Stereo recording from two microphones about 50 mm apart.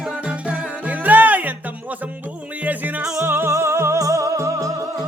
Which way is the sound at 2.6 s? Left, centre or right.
Right.